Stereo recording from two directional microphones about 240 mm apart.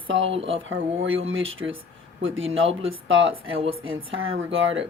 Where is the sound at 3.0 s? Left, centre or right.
Right.